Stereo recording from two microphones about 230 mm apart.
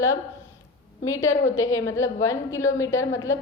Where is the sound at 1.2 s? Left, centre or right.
Left.